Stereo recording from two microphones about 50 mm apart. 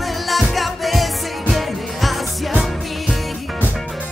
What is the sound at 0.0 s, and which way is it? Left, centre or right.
Music, centre.